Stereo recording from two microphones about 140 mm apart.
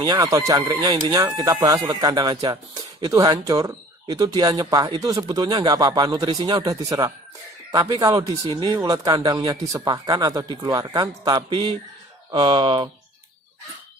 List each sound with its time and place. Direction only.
0.0 s speech: 25° right (ahead or behind)